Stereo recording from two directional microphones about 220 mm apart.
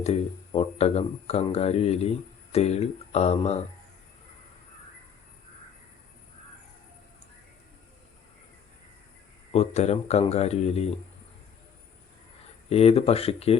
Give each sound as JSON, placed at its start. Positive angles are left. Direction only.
{"t": 0.0, "sound": "speech", "side_deg": 30}
{"t": 9.5, "sound": "speech", "side_deg": 30}
{"t": 12.6, "sound": "speech", "side_deg": 25}